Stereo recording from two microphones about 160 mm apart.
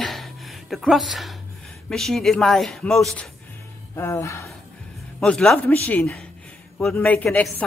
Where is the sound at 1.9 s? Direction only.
Centre (ahead or behind).